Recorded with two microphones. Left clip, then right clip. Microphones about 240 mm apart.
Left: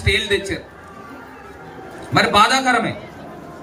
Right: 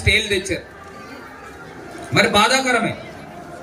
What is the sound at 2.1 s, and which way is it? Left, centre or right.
Speech, left.